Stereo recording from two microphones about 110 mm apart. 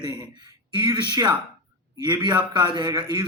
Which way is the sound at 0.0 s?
40° right (ahead or behind).